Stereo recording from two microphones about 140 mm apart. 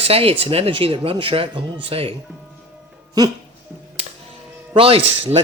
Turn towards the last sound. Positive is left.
turn(degrees=-45)  # may be behind; listen again after turning